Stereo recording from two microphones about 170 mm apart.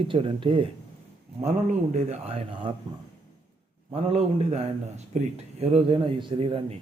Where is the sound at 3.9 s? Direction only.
35° right (ahead or behind).